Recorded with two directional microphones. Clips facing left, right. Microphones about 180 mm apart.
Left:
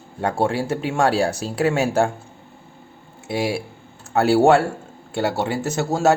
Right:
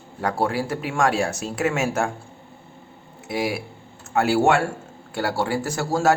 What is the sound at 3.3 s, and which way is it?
Speech, 30° left (ahead or behind).